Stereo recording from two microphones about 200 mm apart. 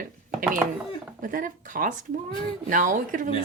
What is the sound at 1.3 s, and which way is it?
Speech, 40° right (ahead or behind).